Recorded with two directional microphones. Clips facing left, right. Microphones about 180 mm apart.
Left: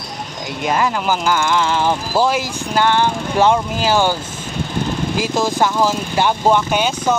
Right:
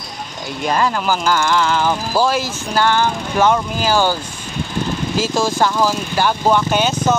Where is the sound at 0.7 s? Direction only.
15° left (ahead or behind).